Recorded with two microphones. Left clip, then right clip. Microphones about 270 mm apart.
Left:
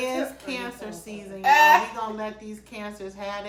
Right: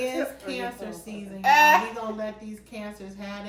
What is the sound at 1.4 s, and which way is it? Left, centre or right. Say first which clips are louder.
Speech: left 1 dB; centre.